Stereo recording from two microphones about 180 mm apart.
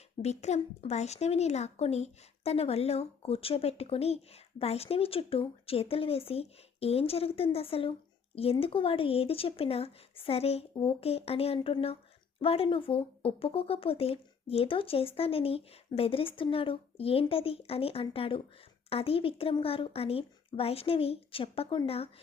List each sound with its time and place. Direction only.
0.2 s speech: 35° left (ahead or behind)